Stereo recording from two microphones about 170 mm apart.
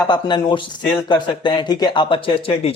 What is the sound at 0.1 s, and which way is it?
Speech, 25° left (ahead or behind).